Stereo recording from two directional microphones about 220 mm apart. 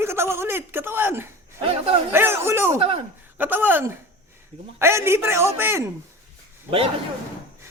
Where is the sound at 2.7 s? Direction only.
25° right (ahead or behind).